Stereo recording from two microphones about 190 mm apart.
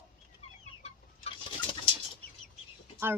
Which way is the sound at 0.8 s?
30° left (ahead or behind).